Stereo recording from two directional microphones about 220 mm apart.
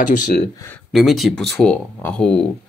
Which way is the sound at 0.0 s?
35° left (ahead or behind).